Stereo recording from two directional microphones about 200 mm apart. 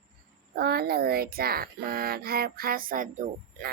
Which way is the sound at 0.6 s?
55° right (ahead or behind).